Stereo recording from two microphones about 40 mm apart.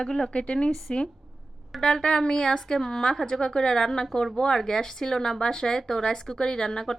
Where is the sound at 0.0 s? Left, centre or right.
Centre.